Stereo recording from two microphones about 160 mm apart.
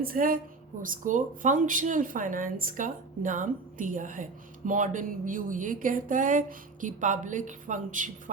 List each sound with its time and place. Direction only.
0.0 s speech: 65° right (ahead or behind)